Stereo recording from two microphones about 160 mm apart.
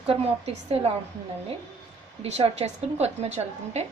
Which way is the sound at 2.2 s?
40° right (ahead or behind).